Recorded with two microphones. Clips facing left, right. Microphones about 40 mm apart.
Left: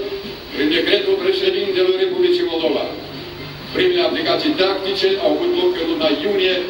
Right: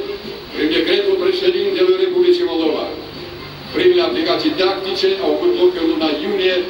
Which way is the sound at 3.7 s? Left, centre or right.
Centre.